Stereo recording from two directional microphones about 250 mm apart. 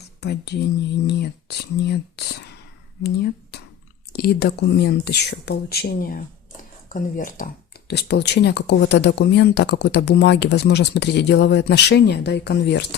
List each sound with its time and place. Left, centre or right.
0.2 s speech: left
3.5 s a sound: left
4.1 s speech: left